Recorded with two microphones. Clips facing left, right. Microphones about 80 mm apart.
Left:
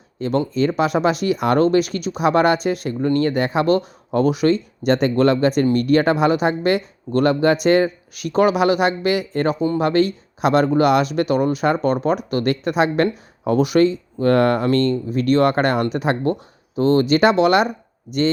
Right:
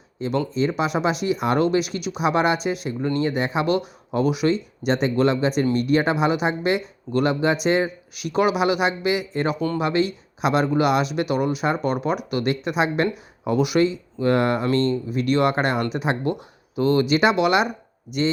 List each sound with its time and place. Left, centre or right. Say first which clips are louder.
0.2 s speech: left 3 dB; left
1.5 s speech: left 4 dB; left